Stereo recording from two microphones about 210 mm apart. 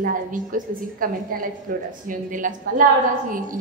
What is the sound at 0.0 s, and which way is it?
A woman's voice, 40° right (ahead or behind).